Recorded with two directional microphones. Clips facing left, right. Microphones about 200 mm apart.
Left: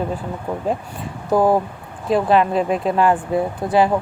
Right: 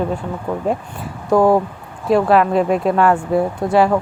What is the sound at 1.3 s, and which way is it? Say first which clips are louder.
Speech: right 3 dB; 5° left (ahead or behind).